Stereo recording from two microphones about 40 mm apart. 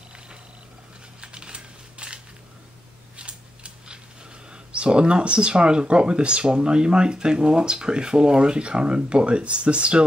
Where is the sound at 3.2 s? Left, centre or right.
Right.